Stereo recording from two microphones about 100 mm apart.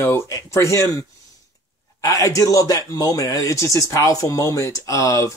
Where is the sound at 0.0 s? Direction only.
30° left (ahead or behind).